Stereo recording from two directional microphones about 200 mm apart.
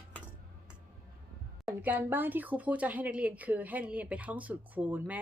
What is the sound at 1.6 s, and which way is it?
Speech, 10° right (ahead or behind).